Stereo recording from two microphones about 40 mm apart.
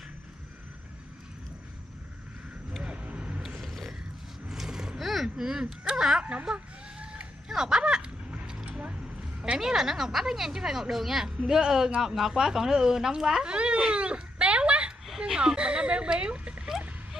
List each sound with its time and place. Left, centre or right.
2.8 s vehicle: right
3.4 s roaring cats: centre
4.5 s a sound: centre
5.4 s speech: centre
6.5 s chicken: right
7.4 s a sound: centre; by 8.9 s right
9.6 s speech: centre
15.0 s speech: centre